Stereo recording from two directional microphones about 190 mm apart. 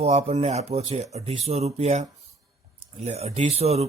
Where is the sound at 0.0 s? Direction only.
35° right (ahead or behind).